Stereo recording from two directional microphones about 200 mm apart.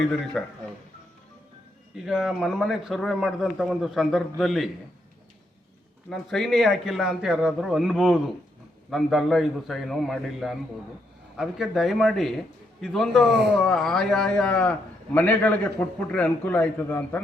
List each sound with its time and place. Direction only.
0.4 s a man's voice: 5° left (ahead or behind)
2.0 s a man's voice: 5° right (ahead or behind)
6.1 s a man's voice: centre (ahead or behind)
13.3 s speech: 55° right (ahead or behind)
13.6 s a man's voice: 5° left (ahead or behind)